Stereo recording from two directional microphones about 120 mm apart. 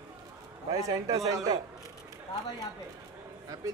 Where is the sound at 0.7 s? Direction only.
30° right (ahead or behind).